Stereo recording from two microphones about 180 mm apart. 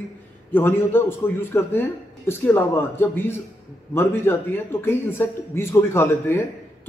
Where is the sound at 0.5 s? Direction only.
10° left (ahead or behind).